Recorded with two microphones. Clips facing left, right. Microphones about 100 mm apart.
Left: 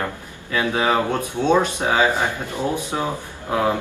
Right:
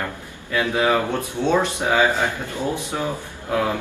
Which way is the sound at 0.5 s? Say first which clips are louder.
Even; 20° left (ahead or behind).